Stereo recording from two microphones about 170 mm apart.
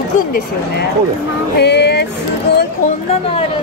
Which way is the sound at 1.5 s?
80° left.